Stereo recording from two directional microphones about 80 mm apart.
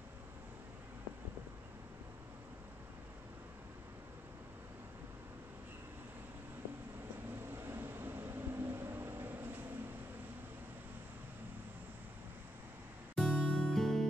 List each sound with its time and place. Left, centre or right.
7.5 s vehicle: right
13.1 s music: centre